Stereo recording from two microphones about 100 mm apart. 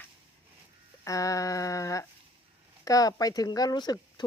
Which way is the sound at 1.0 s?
35° left (ahead or behind).